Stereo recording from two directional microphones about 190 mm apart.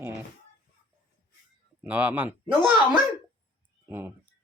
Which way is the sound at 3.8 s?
10° right (ahead or behind).